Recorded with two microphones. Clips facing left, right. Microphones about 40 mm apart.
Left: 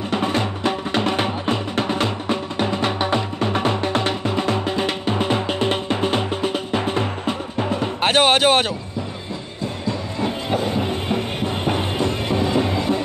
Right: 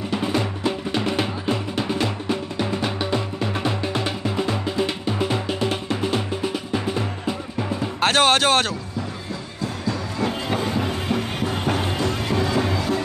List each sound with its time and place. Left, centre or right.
0.1 s music: left
8.0 s music: centre
10.7 s music: left